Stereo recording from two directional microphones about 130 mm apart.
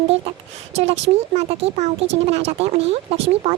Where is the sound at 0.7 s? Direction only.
55° right (ahead or behind).